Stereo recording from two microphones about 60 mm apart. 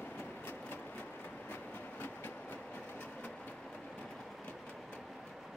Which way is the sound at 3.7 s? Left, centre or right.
Centre.